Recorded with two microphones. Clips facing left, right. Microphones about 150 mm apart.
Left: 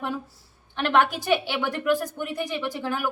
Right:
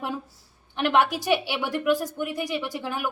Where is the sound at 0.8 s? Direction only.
15° right (ahead or behind).